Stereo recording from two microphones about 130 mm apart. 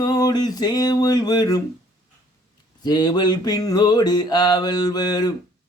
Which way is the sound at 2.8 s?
30° left (ahead or behind).